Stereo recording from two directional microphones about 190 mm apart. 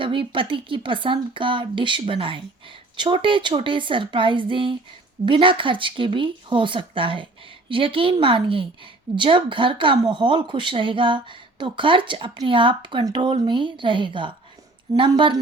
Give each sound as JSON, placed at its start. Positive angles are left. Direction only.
{"t": 0.0, "sound": "speech", "side_deg": -25}